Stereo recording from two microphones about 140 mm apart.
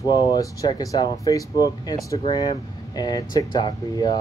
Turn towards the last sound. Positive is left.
turn(degrees=30)  # may be behind; listen again after turning